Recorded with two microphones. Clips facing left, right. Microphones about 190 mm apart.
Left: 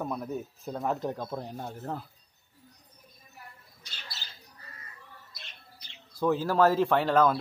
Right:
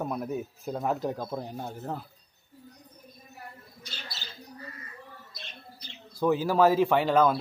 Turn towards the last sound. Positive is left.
turn(degrees=-5)  # may be behind; listen again after turning